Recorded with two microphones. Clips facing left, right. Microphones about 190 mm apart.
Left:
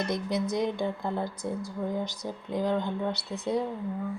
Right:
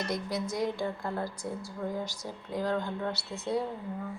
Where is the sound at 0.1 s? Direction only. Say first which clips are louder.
Left 4 dB; 20° left (ahead or behind).